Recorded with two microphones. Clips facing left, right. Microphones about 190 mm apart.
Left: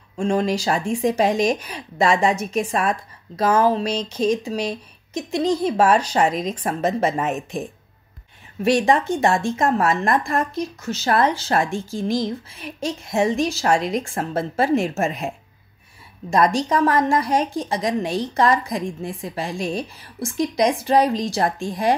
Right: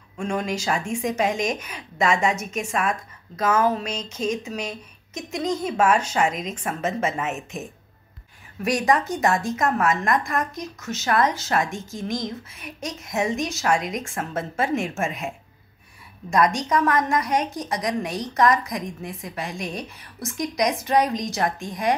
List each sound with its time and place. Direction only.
0.2 s speech: 30° left (ahead or behind)
8.6 s a woman's voice: 25° left (ahead or behind)